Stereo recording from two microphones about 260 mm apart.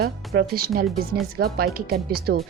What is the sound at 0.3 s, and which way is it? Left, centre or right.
Speech, right.